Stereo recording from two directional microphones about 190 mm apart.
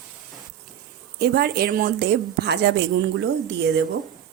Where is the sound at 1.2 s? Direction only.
55° right (ahead or behind).